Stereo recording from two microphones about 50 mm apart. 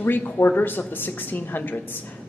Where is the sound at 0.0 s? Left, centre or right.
Left.